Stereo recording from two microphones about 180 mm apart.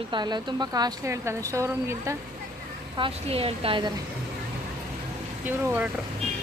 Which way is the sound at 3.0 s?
30° right (ahead or behind).